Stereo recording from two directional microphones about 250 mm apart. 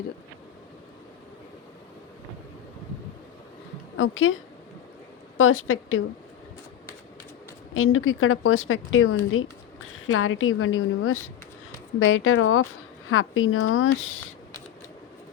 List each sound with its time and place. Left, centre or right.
3.9 s speech: left
5.4 s a woman's voice: left
7.7 s a woman's voice: left